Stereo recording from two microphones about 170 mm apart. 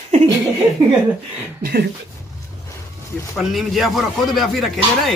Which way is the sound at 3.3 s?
Centre (ahead or behind).